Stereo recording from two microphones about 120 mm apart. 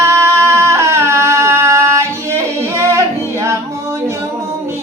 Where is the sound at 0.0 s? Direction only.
20° right (ahead or behind).